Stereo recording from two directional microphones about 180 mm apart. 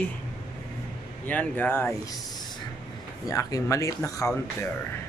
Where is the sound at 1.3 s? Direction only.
10° left (ahead or behind).